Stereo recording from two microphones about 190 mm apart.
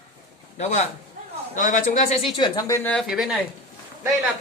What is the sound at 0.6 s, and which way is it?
Speech, 40° left (ahead or behind).